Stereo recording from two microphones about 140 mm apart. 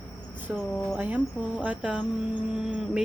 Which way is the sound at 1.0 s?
10° right (ahead or behind).